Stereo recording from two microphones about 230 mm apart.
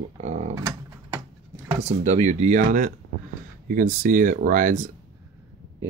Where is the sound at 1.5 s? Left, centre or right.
Right.